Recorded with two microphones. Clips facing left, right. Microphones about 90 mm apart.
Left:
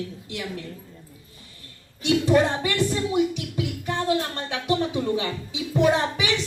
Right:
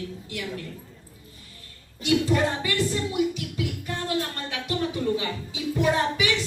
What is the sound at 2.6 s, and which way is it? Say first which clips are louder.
Music: left 2 dB; 20° left (ahead or behind).